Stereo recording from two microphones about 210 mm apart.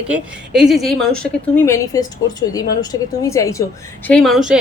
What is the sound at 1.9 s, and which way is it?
A woman's voice, 15° left (ahead or behind).